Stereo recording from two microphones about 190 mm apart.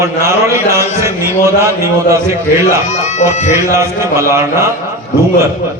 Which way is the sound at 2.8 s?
35° left (ahead or behind).